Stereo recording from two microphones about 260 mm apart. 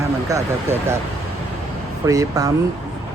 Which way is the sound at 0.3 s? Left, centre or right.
Centre.